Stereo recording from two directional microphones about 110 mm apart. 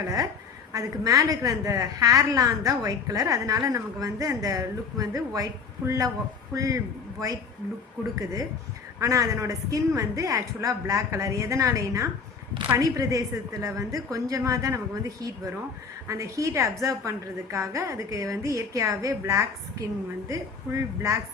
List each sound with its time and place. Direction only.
0.7 s a woman's voice: 30° right (ahead or behind)
16.0 s a woman's voice: 30° right (ahead or behind)